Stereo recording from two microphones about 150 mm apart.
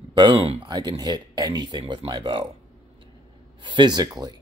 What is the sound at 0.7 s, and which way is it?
Speech, 25° right (ahead or behind).